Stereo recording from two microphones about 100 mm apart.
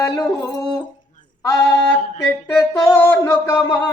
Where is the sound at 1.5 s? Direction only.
25° left (ahead or behind).